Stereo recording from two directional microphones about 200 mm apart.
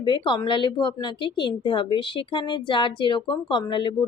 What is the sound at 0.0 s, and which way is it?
Speech, 25° left (ahead or behind).